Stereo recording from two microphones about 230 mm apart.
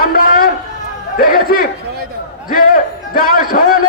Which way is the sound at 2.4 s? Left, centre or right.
Left.